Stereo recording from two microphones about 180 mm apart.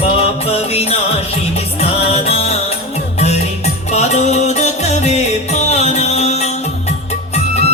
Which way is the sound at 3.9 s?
40° left (ahead or behind).